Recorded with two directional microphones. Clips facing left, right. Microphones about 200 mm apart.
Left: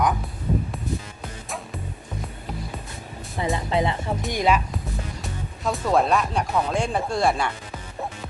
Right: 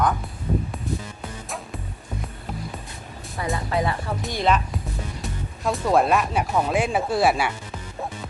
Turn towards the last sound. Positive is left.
turn(degrees=-5)  # may be behind; listen again after turning